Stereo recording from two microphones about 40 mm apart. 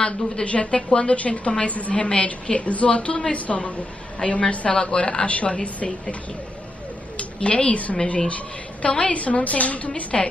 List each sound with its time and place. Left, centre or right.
0.0 s a woman's voice: left
7.2 s a woman's voice: left